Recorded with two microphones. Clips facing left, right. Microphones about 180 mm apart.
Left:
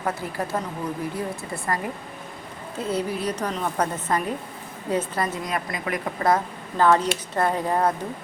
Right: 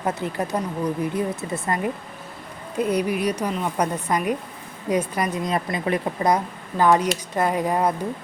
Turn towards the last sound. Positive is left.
turn(degrees=-10)  # may be behind; listen again after turning